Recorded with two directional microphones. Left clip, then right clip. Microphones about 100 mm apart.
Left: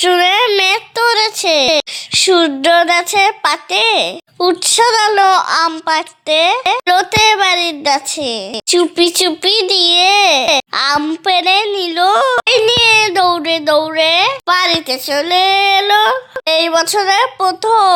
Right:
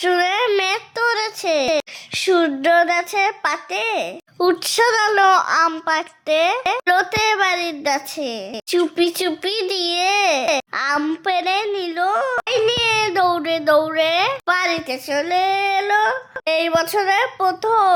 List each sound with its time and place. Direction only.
0.0 s a sound: 20° left (ahead or behind)
4.4 s a child's voice: 5° right (ahead or behind); by 12.0 s 25° left (ahead or behind)
12.0 s speech: 40° left (ahead or behind)
12.5 s speech: 25° left (ahead or behind); by 16.1 s 40° left (ahead or behind)
16.5 s a child's voice: 15° left (ahead or behind)